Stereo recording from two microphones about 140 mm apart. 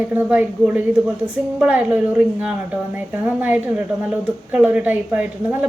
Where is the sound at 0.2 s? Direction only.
10° right (ahead or behind).